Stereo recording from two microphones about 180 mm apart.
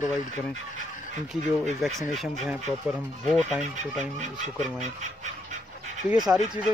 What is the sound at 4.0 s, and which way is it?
Speech, 40° right (ahead or behind).